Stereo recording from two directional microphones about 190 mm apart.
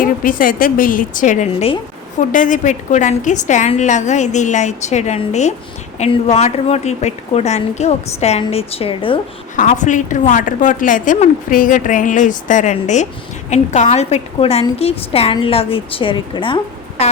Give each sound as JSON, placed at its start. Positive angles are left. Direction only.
{"t": 0.0, "sound": "a woman's voice", "side_deg": 45}
{"t": 2.3, "sound": "a woman's voice", "side_deg": 40}
{"t": 9.6, "sound": "a woman's voice", "side_deg": 40}